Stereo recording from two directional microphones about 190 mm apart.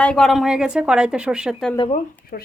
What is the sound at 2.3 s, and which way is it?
Speech, 50° left (ahead or behind).